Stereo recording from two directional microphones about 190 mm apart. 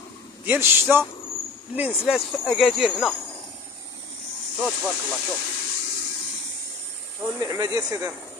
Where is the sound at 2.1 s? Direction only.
Centre (ahead or behind).